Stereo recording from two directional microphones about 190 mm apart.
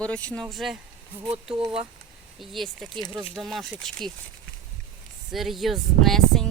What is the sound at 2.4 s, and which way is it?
Speech, centre (ahead or behind).